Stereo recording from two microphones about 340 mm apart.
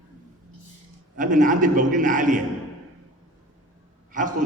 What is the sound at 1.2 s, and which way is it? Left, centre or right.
A man's voice, right.